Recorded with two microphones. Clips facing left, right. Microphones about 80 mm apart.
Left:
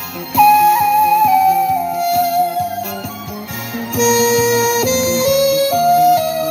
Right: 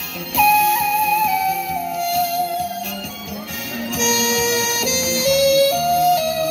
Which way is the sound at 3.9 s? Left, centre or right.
Left.